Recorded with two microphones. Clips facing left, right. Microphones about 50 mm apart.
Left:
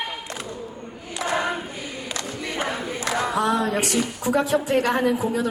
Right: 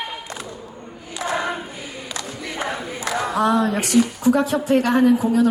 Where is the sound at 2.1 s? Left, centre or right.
Centre.